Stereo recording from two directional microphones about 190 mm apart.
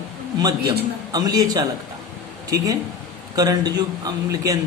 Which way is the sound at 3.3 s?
20° right (ahead or behind).